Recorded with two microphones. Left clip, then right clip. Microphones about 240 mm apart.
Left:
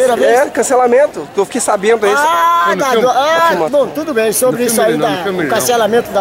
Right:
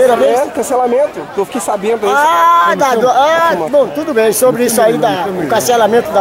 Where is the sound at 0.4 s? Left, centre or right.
Centre.